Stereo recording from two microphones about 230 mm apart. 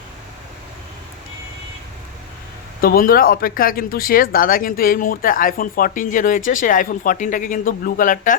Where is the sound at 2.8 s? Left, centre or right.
Left.